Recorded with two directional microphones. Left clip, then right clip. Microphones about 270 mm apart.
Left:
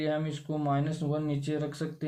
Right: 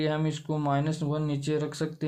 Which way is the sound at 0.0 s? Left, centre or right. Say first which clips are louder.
Right 2 dB; right.